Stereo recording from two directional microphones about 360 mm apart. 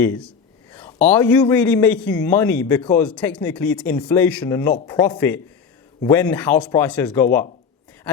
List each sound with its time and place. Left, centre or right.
0.0 s a man's voice: centre